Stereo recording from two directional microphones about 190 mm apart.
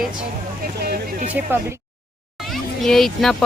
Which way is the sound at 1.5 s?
10° right (ahead or behind).